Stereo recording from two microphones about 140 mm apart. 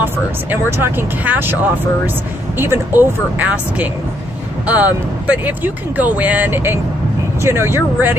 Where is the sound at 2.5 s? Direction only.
15° right (ahead or behind).